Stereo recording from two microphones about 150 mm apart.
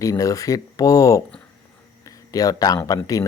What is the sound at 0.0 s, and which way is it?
Speech, 20° left (ahead or behind).